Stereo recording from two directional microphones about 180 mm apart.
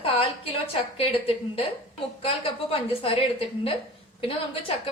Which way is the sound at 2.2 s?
30° left (ahead or behind).